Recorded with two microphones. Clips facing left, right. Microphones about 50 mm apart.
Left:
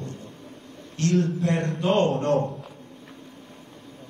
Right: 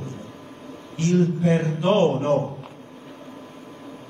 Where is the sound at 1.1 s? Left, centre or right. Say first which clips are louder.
Right 4 dB; centre.